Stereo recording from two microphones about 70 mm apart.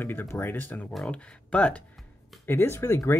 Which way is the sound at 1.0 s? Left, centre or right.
Centre.